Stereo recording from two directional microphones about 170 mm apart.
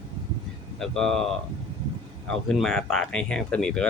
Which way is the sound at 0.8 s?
Centre (ahead or behind).